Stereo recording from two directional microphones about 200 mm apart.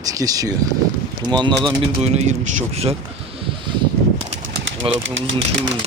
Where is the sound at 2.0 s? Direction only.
35° right (ahead or behind).